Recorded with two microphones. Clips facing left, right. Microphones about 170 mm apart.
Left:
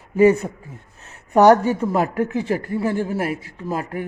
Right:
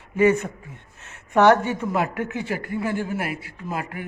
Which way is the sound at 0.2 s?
35° left (ahead or behind).